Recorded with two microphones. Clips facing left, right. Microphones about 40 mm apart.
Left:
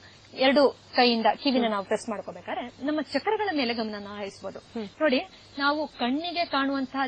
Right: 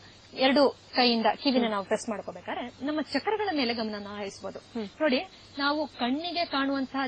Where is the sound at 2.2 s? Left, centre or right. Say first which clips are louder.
Left 1 dB; left.